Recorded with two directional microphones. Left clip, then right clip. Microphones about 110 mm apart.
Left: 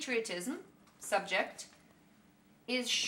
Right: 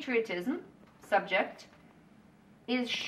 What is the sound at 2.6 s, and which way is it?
Speech, 20° left (ahead or behind).